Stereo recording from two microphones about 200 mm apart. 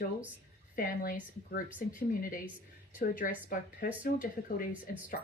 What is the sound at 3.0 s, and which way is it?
A woman's voice, 45° left (ahead or behind).